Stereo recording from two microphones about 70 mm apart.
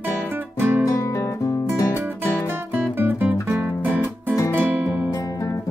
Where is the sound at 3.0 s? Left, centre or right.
Right.